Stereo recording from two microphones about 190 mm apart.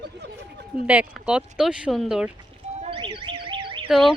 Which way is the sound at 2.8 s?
30° right (ahead or behind).